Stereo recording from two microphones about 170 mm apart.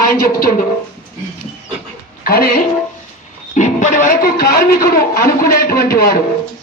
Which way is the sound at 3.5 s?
45° left (ahead or behind).